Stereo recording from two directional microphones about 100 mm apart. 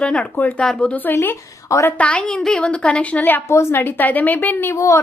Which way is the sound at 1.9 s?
10° left (ahead or behind).